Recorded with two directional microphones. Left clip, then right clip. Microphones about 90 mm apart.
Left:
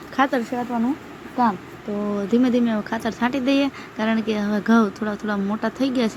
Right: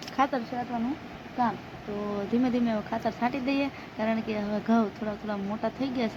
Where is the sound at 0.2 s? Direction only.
30° left (ahead or behind).